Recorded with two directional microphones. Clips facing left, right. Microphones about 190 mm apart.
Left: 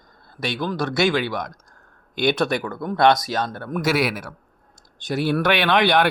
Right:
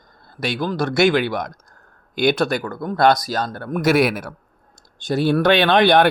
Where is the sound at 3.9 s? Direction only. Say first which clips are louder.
Right 6 dB; 50° right (ahead or behind).